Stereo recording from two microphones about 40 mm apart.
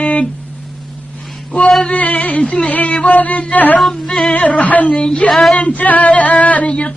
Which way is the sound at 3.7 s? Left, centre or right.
Centre.